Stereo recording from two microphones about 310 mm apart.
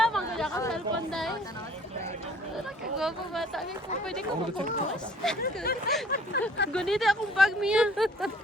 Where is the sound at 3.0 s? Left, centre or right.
Centre.